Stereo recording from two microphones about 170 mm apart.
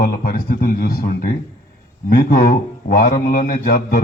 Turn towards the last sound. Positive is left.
turn(degrees=60)  # may be behind; listen again after turning